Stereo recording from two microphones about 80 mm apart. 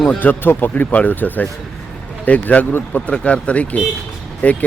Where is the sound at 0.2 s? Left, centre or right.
Left.